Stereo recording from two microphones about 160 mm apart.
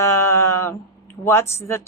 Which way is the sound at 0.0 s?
15° left (ahead or behind).